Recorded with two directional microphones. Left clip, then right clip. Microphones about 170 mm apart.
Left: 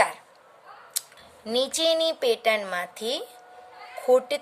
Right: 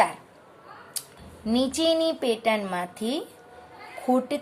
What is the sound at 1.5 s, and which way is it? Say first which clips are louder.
A woman's voice: even; 45° left (ahead or behind).